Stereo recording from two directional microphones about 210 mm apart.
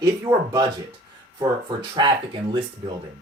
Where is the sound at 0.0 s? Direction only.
15° right (ahead or behind).